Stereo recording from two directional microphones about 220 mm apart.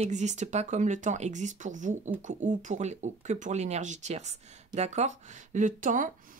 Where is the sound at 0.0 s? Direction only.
30° right (ahead or behind).